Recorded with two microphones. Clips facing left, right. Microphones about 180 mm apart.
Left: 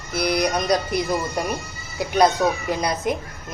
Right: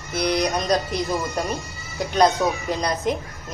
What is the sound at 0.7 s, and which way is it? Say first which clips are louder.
Speech: left 1 dB; 15° left (ahead or behind).